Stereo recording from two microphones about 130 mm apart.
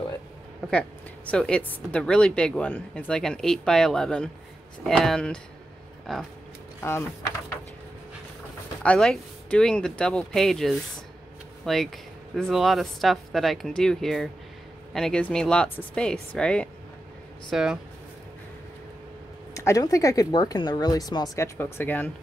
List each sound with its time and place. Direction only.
0.7 s speech: 10° left (ahead or behind)
6.8 s speech: 20° left (ahead or behind)
8.8 s speech: 5° left (ahead or behind)
17.5 s speech: 5° right (ahead or behind)
19.5 s speech: 25° left (ahead or behind)
21.5 s speech: 15° left (ahead or behind)